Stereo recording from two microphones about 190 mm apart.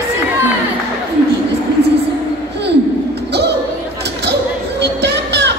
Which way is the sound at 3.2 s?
60° right (ahead or behind).